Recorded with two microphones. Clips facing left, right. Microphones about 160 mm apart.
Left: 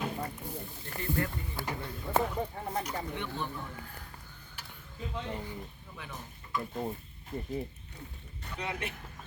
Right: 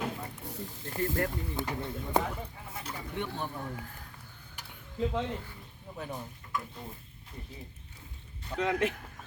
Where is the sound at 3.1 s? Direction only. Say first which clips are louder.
Right 1 dB; 45° right (ahead or behind).